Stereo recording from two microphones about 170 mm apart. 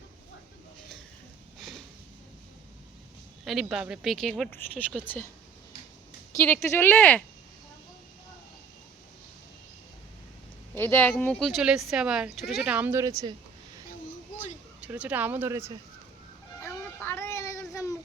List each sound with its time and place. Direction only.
3.4 s speech: 5° right (ahead or behind)
6.3 s speech: 15° left (ahead or behind)
10.8 s speech: 10° left (ahead or behind); by 13.3 s 20° right (ahead or behind)
14.8 s speech: 5° right (ahead or behind)
16.6 s music: 15° left (ahead or behind)